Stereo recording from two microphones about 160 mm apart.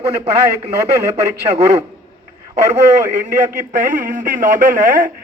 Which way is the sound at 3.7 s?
55° right (ahead or behind).